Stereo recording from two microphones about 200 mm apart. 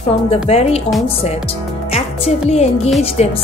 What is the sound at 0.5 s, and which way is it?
Speech, 30° left (ahead or behind).